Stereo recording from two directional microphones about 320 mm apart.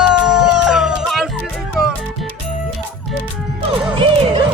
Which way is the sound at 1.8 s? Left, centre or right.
Centre.